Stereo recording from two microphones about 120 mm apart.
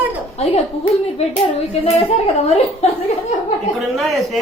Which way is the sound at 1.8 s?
55° left (ahead or behind).